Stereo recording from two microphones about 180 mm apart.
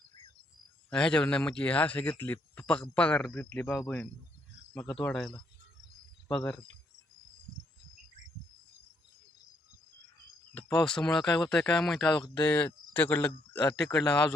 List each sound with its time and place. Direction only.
0.9 s speech: 5° left (ahead or behind)
10.5 s speech: 10° left (ahead or behind)